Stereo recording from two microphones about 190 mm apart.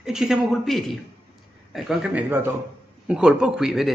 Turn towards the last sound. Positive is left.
turn(degrees=0)  # may be behind; listen again after turning